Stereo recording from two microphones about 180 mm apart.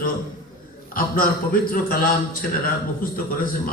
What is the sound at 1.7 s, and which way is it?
A man's voice, 55° left (ahead or behind).